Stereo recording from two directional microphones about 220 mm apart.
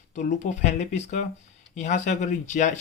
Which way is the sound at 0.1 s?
35° left (ahead or behind).